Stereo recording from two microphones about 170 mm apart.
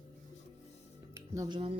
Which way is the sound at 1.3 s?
25° right (ahead or behind).